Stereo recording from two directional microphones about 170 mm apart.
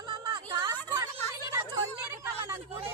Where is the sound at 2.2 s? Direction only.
15° right (ahead or behind).